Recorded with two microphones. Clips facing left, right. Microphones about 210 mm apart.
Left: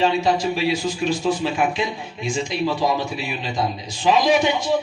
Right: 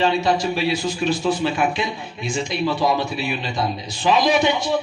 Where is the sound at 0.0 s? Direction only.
65° right (ahead or behind).